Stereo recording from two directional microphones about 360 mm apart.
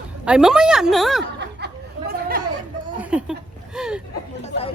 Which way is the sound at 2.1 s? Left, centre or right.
Right.